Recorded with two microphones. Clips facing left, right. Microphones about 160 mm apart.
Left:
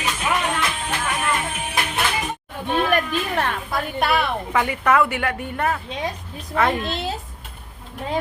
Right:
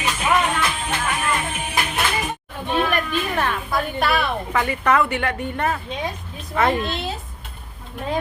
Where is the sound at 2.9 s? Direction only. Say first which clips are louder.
Left 1 dB; 35° left (ahead or behind).